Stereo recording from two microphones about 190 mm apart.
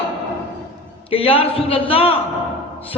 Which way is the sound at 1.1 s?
30° left (ahead or behind).